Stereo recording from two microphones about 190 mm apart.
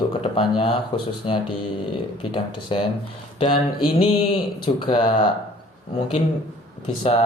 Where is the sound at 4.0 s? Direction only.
30° left (ahead or behind).